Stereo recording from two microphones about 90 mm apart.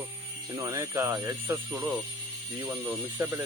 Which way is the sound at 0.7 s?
30° right (ahead or behind).